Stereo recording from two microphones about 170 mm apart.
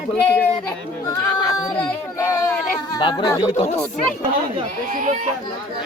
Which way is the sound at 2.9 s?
25° left (ahead or behind).